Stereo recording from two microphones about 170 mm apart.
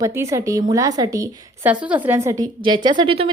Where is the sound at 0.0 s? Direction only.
15° right (ahead or behind).